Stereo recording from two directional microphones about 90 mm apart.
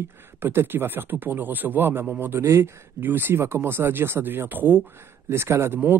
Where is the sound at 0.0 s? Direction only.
25° right (ahead or behind).